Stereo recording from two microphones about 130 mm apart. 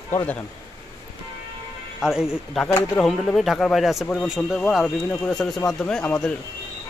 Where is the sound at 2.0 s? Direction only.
5° right (ahead or behind).